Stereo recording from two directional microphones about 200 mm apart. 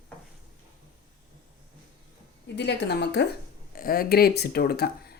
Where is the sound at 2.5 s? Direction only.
60° left (ahead or behind).